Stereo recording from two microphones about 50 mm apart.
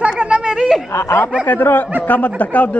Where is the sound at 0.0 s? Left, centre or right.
Centre.